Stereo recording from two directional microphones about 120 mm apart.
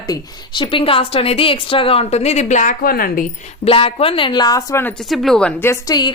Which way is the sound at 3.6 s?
50° left (ahead or behind).